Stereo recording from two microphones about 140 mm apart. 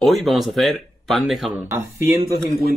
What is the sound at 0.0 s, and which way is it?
Speech, centre (ahead or behind).